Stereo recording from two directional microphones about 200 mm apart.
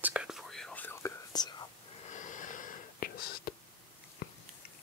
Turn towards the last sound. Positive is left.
turn(degrees=50)  # may be behind; listen again after turning